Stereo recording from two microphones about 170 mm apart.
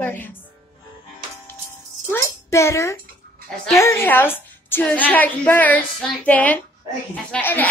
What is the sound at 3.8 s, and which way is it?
A woman's voice, 15° left (ahead or behind).